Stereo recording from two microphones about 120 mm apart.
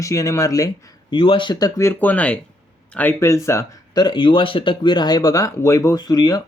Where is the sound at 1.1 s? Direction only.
45° left (ahead or behind).